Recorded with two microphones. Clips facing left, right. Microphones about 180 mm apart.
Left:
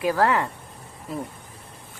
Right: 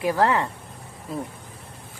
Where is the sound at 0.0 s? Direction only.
20° right (ahead or behind).